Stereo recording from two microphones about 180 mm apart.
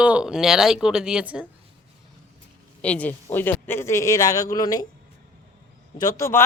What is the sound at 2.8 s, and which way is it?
Speech, 10° left (ahead or behind).